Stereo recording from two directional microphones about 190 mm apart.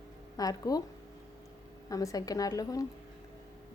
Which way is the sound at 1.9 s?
20° left (ahead or behind).